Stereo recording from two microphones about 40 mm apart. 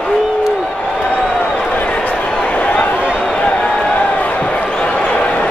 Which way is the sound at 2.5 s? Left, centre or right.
Left.